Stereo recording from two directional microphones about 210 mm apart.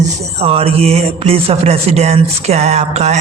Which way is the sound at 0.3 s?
30° right (ahead or behind).